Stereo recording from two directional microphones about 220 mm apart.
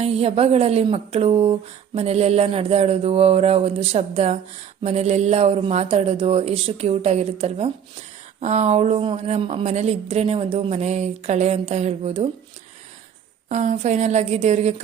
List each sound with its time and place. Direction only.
0.0 s a woman's voice: 25° right (ahead or behind)
13.5 s speech: 35° right (ahead or behind)